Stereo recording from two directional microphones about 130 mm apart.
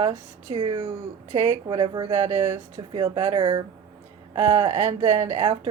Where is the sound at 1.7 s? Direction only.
40° right (ahead or behind).